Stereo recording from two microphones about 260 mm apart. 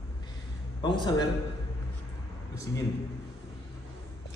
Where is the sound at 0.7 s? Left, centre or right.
Centre.